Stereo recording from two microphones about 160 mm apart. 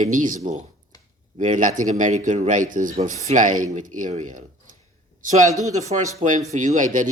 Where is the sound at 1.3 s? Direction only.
50° right (ahead or behind).